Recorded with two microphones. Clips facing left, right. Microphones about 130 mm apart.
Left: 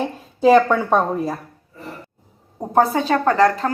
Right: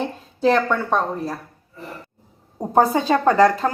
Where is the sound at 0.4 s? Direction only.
5° left (ahead or behind).